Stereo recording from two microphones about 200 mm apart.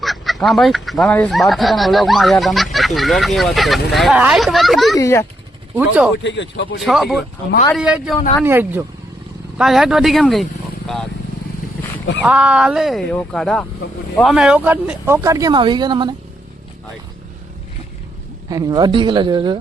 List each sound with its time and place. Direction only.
0.0 s speech: centre (ahead or behind)
4.9 s speech: 15° left (ahead or behind)
5.7 s speech: 5° right (ahead or behind)
6.2 s speech: 65° left (ahead or behind)
6.7 s speech: centre (ahead or behind)
12.2 s speech: 5° right (ahead or behind); by 16.1 s 20° right (ahead or behind)
18.4 s speech: 20° right (ahead or behind)